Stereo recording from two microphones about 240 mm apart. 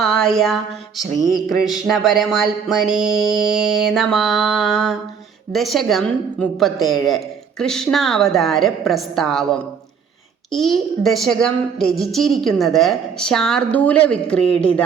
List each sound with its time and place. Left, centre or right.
0.0 s a woman's voice: centre